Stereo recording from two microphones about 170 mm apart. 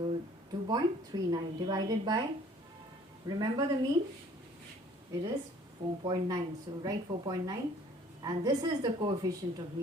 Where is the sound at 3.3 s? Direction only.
25° right (ahead or behind).